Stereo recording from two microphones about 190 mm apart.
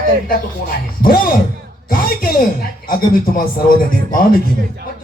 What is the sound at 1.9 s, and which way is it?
Speech, 50° left (ahead or behind).